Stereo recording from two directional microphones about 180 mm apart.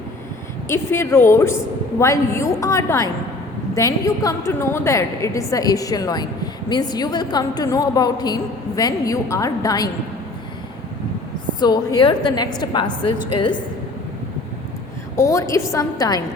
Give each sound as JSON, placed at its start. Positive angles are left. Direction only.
{"t": 0.7, "sound": "a woman's voice", "side_deg": 15}
{"t": 11.6, "sound": "a woman's voice", "side_deg": 20}
{"t": 15.1, "sound": "a woman's voice", "side_deg": 15}